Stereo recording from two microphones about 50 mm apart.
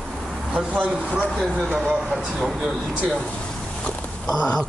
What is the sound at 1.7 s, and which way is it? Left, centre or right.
Speech, right.